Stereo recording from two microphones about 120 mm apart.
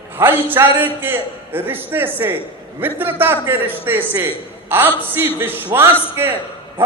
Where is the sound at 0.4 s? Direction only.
20° right (ahead or behind).